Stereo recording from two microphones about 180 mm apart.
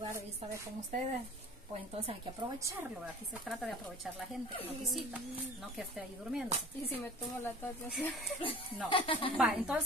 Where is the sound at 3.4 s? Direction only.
Centre (ahead or behind).